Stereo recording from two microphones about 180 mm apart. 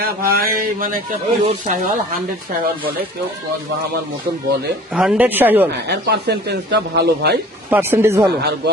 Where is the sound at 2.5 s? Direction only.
55° right (ahead or behind).